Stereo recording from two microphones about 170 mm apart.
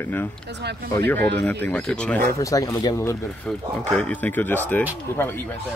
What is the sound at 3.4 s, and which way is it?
Speech, 5° left (ahead or behind).